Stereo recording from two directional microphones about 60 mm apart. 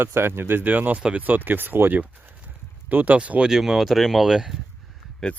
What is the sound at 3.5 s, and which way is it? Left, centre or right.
Speech, centre.